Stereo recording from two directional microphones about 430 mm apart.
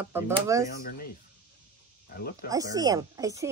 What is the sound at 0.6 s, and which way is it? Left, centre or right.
Speech, left.